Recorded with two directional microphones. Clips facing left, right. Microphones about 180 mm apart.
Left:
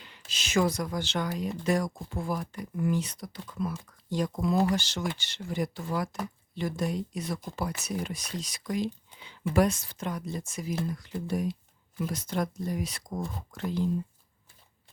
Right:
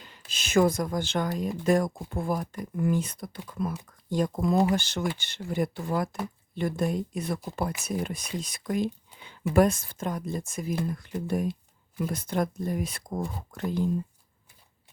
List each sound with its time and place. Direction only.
0.0 s speech: 50° right (ahead or behind)